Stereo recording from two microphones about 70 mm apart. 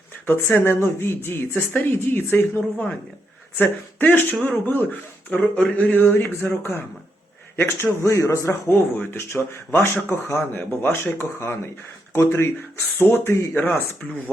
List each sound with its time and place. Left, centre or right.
0.3 s speech: left
6.1 s speech: left